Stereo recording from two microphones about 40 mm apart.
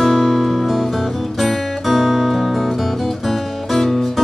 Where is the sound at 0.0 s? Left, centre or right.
Centre.